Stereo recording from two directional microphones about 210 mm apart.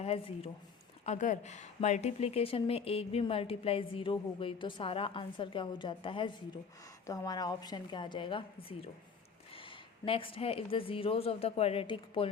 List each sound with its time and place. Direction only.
0.0 s a woman's voice: 25° left (ahead or behind)